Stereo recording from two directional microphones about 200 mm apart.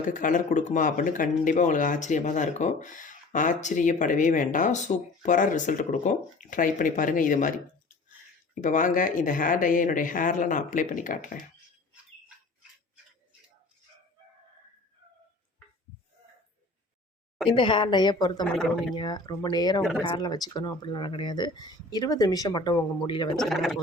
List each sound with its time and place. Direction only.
0.1 s speech: 40° left (ahead or behind)
8.6 s speech: 40° left (ahead or behind)
17.5 s speech: 25° left (ahead or behind)
18.4 s speech: centre (ahead or behind)
18.9 s speech: 20° left (ahead or behind)
23.4 s speech: centre (ahead or behind)